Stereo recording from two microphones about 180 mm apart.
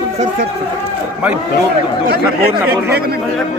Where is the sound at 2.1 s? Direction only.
65° right (ahead or behind).